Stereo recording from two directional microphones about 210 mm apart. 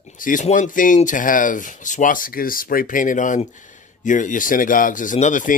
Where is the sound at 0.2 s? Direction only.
35° left (ahead or behind).